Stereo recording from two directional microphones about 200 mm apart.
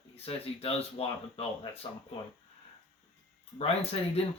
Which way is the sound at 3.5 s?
30° left (ahead or behind).